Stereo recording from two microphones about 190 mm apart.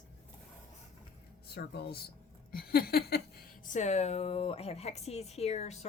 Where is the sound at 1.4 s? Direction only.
55° left (ahead or behind).